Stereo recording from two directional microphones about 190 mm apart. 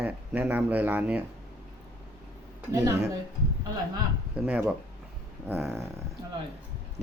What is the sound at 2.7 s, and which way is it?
Speech, 15° right (ahead or behind).